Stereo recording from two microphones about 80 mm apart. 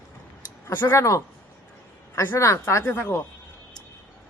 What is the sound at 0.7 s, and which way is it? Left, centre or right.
Speech, left.